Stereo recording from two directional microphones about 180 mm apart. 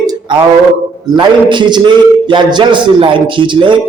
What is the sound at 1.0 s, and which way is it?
A man's voice, 25° right (ahead or behind).